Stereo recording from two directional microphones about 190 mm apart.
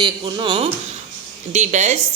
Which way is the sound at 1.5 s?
35° right (ahead or behind).